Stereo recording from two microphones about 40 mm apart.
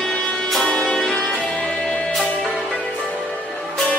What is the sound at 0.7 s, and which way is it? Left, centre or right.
Music, left.